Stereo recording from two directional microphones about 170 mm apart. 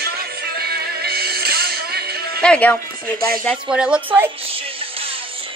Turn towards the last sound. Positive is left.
turn(degrees=-10)  # may be behind; listen again after turning